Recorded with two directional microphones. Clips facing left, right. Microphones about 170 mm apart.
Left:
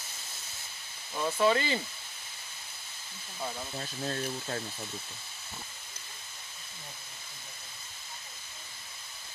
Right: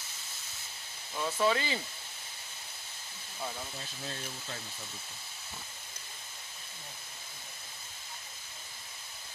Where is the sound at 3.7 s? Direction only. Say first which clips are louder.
Left 7 dB; 50° left (ahead or behind).